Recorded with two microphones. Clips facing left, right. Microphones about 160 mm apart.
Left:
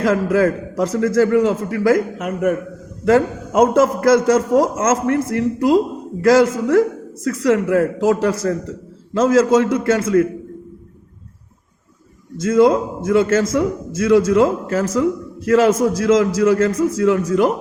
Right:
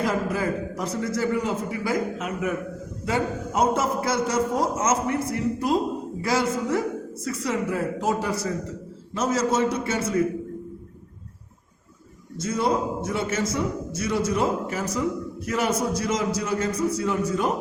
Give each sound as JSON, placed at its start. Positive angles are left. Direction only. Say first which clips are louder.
{"t": 0.0, "sound": "a man's voice", "louder": "left 9 dB", "side_deg": 90}
{"t": 2.1, "sound": "a man's voice", "louder": "left 8 dB", "side_deg": 55}
{"t": 3.0, "sound": "a man's voice", "louder": "left 11 dB", "side_deg": 90}
{"t": 12.4, "sound": "a man's voice", "louder": "left 10 dB", "side_deg": 90}